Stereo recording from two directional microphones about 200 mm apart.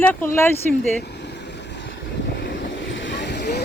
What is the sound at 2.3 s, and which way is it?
Vehicle, 60° left (ahead or behind).